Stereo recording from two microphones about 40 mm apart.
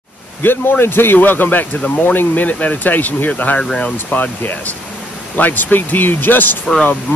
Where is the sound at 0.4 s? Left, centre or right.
Left.